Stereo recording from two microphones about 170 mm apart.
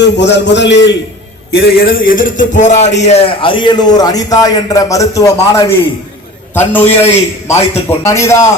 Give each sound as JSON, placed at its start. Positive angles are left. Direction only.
{"t": 0.2, "sound": "a man's voice", "side_deg": 90}
{"t": 1.5, "sound": "a man's voice", "side_deg": 70}